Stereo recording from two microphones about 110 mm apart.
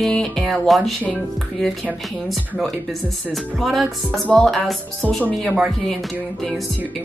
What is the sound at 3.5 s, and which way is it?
Speech, centre (ahead or behind).